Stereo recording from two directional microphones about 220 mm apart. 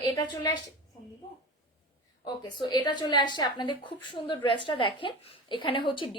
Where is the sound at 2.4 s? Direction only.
20° left (ahead or behind).